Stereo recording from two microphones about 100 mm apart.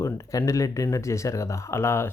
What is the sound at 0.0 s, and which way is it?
Speech, 30° left (ahead or behind).